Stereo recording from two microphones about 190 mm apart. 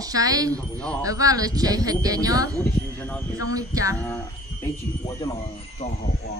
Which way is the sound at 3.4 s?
20° right (ahead or behind).